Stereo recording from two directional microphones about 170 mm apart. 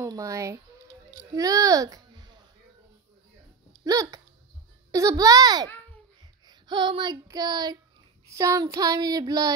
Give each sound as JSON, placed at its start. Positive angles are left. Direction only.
{"t": 0.0, "sound": "child singing", "side_deg": -20}
{"t": 1.3, "sound": "a child's voice", "side_deg": -20}
{"t": 3.8, "sound": "child singing", "side_deg": -20}